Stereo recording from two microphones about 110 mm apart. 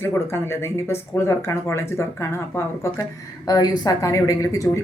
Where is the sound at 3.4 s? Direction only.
35° left (ahead or behind).